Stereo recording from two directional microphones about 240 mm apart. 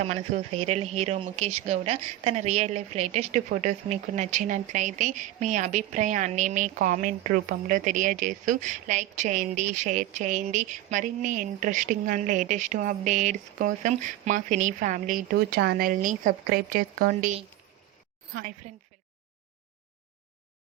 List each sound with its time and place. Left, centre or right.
0.0 s speech: right